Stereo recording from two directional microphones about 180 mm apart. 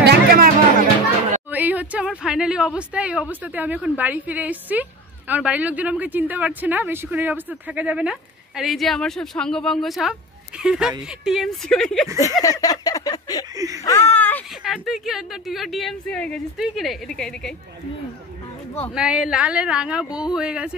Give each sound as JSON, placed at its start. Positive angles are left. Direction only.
{"t": 0.0, "sound": "music", "side_deg": -60}
{"t": 1.5, "sound": "a woman's voice", "side_deg": -10}
{"t": 12.2, "sound": "a sound", "side_deg": 20}
{"t": 14.6, "sound": "a woman's voice", "side_deg": 0}
{"t": 18.9, "sound": "a woman's voice", "side_deg": -5}